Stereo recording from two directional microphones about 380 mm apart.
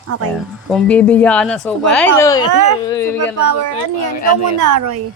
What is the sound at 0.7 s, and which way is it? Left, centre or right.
Speech, centre.